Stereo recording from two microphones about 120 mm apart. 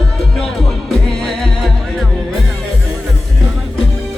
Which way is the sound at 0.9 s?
Centre (ahead or behind).